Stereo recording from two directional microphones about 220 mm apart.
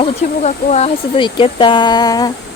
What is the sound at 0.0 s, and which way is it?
Speech, 30° left (ahead or behind).